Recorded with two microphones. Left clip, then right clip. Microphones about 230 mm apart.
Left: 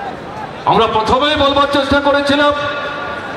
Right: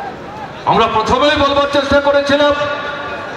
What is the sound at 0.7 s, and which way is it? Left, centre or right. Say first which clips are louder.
A man's voice: even; right.